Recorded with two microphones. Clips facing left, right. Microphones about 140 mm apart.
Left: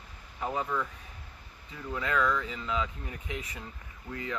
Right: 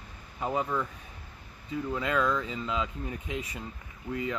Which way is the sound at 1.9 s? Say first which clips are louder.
Even; 20° right (ahead or behind).